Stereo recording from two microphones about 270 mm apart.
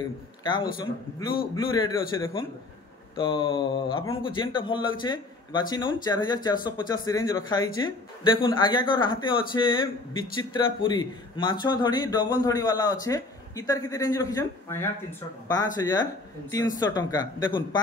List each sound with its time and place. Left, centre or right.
0.4 s a man's voice: centre
3.2 s speech: centre